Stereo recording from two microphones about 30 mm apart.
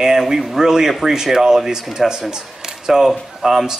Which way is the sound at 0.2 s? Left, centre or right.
Centre.